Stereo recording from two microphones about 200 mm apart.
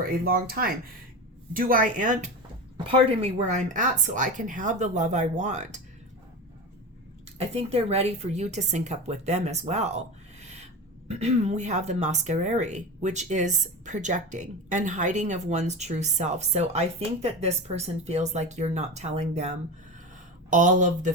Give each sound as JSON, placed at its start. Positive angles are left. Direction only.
{"t": 0.0, "sound": "speech", "side_deg": -45}
{"t": 2.7, "sound": "speech", "side_deg": -25}
{"t": 7.3, "sound": "speech", "side_deg": -30}
{"t": 11.1, "sound": "speech", "side_deg": -35}